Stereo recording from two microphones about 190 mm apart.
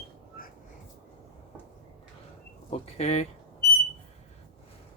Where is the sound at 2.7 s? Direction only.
35° left (ahead or behind).